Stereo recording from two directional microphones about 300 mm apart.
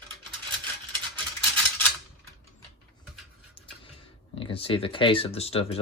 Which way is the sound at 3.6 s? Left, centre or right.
Centre.